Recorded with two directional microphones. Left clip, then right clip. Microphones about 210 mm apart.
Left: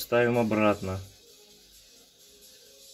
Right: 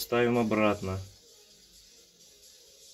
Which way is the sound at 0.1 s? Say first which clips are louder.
Left 2 dB; 15° left (ahead or behind).